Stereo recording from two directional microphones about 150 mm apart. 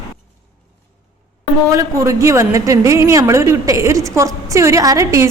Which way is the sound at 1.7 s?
20° right (ahead or behind).